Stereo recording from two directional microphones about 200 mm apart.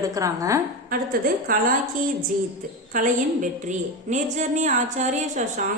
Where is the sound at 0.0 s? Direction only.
15° right (ahead or behind).